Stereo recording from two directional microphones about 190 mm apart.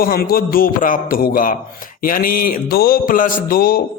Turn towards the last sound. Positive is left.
turn(degrees=50)  # may be behind; listen again after turning